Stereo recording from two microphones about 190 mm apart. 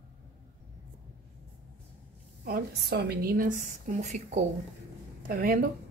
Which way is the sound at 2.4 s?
55° right (ahead or behind).